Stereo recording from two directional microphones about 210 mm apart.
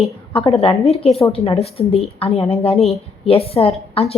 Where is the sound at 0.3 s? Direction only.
25° left (ahead or behind).